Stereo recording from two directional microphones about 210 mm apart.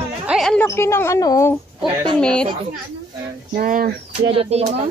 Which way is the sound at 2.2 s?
5° left (ahead or behind).